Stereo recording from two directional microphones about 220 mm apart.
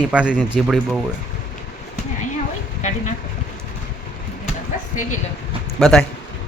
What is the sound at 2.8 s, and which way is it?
Speech, 35° left (ahead or behind).